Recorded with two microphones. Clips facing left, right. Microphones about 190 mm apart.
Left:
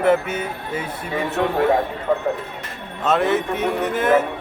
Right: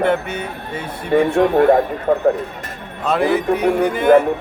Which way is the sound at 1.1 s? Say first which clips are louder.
Right 8 dB; 50° right (ahead or behind).